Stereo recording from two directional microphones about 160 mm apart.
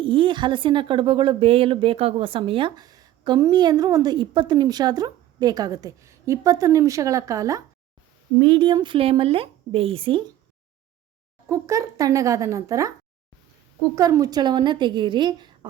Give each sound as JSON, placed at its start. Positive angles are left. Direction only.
{"t": 0.0, "sound": "speech", "side_deg": -30}
{"t": 11.4, "sound": "speech", "side_deg": -20}
{"t": 13.9, "sound": "speech", "side_deg": -20}